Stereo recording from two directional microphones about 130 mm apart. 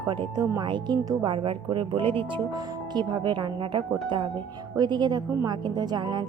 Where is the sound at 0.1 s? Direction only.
40° right (ahead or behind).